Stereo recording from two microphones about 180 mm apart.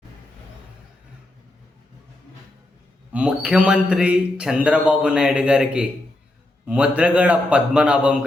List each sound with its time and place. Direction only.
3.1 s a man's voice: 5° right (ahead or behind)